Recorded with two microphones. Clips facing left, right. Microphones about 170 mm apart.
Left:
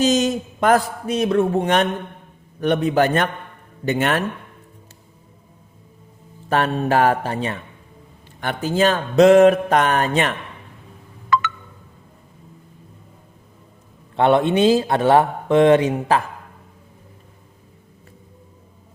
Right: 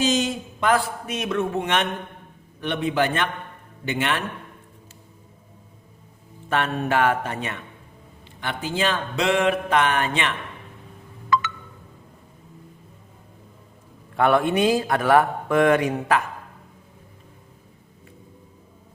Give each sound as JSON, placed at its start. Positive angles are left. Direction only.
{"t": 0.0, "sound": "a man's voice", "side_deg": 40}
{"t": 6.5, "sound": "a man's voice", "side_deg": 35}
{"t": 8.4, "sound": "a man's voice", "side_deg": 45}
{"t": 14.2, "sound": "speech", "side_deg": 25}